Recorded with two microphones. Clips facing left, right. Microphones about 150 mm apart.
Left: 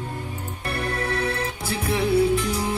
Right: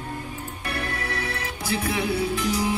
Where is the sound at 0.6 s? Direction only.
30° left (ahead or behind).